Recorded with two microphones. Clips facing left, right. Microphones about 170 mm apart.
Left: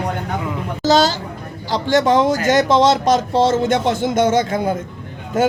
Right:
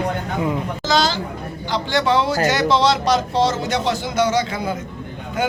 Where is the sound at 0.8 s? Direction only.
40° left (ahead or behind).